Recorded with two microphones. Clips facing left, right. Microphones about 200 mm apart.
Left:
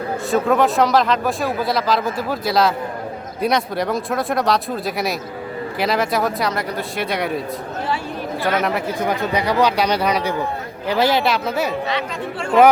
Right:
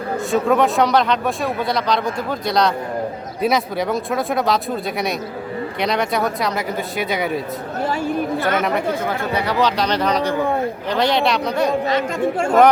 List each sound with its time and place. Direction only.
0.3 s speech: centre (ahead or behind)
8.4 s speech: 50° right (ahead or behind)
9.0 s speech: 15° left (ahead or behind)
11.9 s speech: 45° right (ahead or behind)